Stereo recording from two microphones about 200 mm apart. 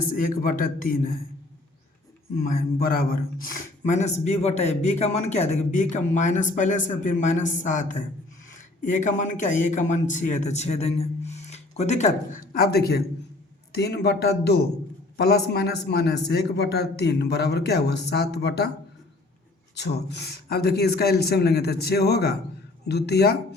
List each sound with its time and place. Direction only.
0.2 s a man's voice: 45° left (ahead or behind)
2.3 s a man's voice: 45° left (ahead or behind)
19.7 s a man's voice: 55° left (ahead or behind)